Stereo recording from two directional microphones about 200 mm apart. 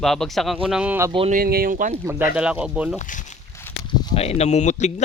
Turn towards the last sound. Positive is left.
turn(degrees=35)  # may be behind; listen again after turning